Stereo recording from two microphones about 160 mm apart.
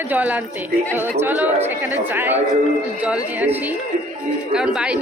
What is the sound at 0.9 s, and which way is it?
Speech, 15° right (ahead or behind).